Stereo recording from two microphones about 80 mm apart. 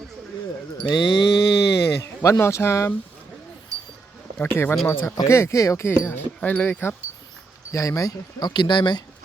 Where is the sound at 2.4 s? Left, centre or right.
Left.